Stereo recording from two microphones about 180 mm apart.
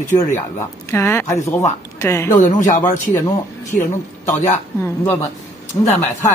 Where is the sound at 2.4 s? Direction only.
45° left (ahead or behind).